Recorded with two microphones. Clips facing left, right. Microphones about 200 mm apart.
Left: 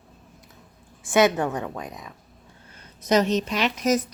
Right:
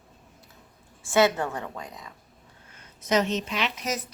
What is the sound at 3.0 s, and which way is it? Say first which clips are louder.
A woman's voice: left 4 dB; 35° left (ahead or behind).